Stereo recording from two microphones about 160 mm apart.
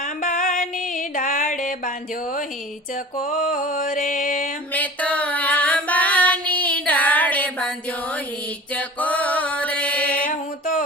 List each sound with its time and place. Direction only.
0.0 s music: 50° left (ahead or behind)
3.2 s mantra: 50° left (ahead or behind)
4.7 s child singing: 10° left (ahead or behind)
8.7 s mantra: 10° left (ahead or behind)
10.2 s a sound: 55° left (ahead or behind)